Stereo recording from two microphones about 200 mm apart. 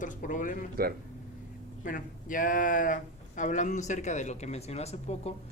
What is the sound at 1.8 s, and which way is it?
Speech, 40° left (ahead or behind).